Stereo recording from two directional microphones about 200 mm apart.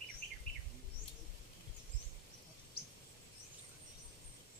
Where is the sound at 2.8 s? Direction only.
50° left (ahead or behind).